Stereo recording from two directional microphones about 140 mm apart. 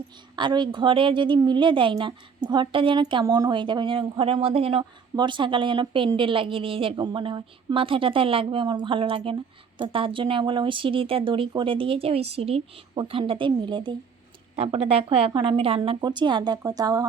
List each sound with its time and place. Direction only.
0.3 s a woman's voice: 35° right (ahead or behind)